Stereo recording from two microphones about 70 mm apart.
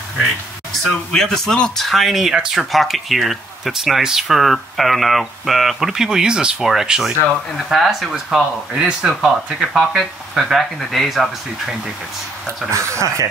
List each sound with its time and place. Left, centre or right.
1.1 s speech: centre
12.7 s speech: right